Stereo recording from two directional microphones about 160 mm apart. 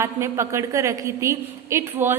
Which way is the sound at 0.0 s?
15° right (ahead or behind).